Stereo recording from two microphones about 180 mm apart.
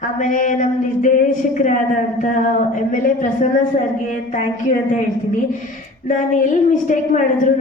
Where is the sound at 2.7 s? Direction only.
45° left (ahead or behind).